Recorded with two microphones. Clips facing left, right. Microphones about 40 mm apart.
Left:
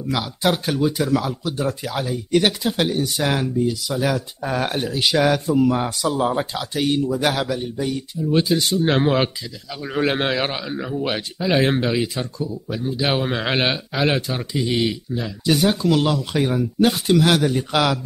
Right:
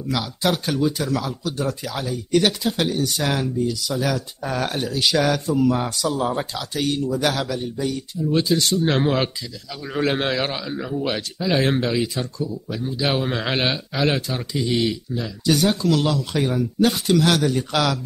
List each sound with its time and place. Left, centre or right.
0.1 s speech: centre
7.4 s speech: centre